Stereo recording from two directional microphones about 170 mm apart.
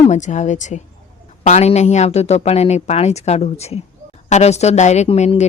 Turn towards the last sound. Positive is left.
turn(degrees=40)  # may be behind; listen again after turning